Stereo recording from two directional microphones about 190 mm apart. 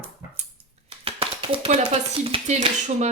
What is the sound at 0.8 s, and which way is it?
Speech, 30° right (ahead or behind).